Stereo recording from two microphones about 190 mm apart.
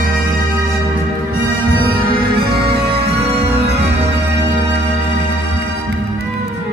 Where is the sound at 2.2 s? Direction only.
55° right (ahead or behind).